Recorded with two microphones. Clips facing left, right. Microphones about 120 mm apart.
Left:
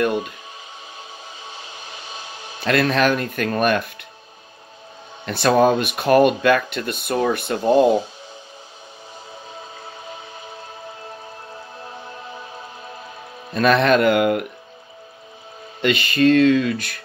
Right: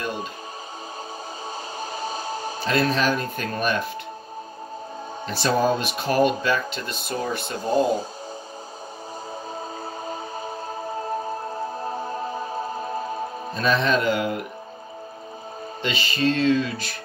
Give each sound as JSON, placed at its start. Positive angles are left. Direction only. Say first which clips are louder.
{"t": 0.0, "sound": "music", "louder": "left 9 dB", "side_deg": 60}
{"t": 1.8, "sound": "music", "louder": "right 7 dB", "side_deg": -40}
{"t": 2.6, "sound": "speech", "louder": "left 4 dB", "side_deg": 65}
{"t": 5.2, "sound": "speech", "louder": "left 6 dB", "side_deg": 60}
{"t": 7.7, "sound": "speech", "louder": "left 6 dB", "side_deg": -40}
{"t": 10.0, "sound": "music", "louder": "right 5 dB", "side_deg": -40}
{"t": 13.6, "sound": "speech", "louder": "left 6 dB", "side_deg": 65}
{"t": 15.8, "sound": "speech", "louder": "left 7 dB", "side_deg": 60}